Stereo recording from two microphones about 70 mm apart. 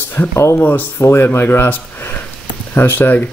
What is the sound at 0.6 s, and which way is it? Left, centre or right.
Speech, left.